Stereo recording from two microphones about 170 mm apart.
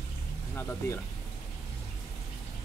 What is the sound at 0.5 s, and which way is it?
Speech, 15° left (ahead or behind).